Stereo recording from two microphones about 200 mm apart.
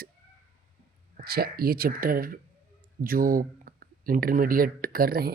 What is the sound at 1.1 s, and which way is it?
Speech, 50° right (ahead or behind).